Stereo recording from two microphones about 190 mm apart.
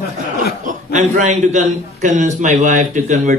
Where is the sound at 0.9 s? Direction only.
40° right (ahead or behind).